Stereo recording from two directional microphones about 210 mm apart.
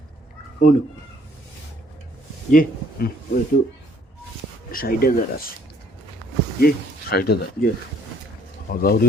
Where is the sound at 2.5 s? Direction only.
40° left (ahead or behind).